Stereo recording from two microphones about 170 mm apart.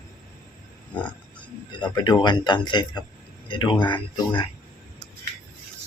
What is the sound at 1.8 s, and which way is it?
Speech, 25° left (ahead or behind).